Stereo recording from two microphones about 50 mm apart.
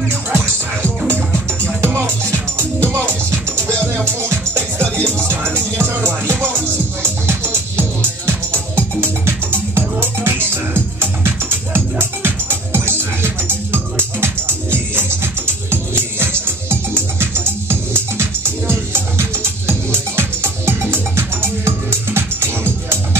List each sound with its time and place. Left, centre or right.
0.1 s music: right